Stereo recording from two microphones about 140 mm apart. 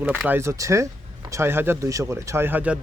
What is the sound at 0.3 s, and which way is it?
Speech, 20° right (ahead or behind).